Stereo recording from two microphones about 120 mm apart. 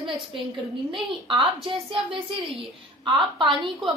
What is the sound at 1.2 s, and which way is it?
Speech, 50° right (ahead or behind).